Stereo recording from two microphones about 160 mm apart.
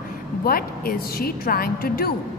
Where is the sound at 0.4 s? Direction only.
65° left (ahead or behind).